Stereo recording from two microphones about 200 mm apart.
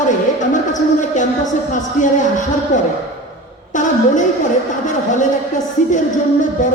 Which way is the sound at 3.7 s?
40° left (ahead or behind).